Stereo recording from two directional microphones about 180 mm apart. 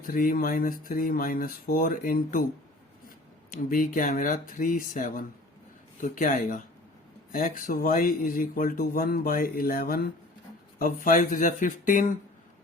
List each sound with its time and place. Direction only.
0.0 s speech: 50° left (ahead or behind)
3.5 s speech: 50° left (ahead or behind)